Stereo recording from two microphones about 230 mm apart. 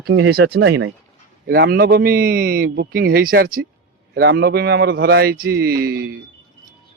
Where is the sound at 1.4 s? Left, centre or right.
Right.